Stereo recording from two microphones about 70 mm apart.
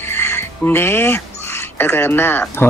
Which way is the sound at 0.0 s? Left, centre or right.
Left.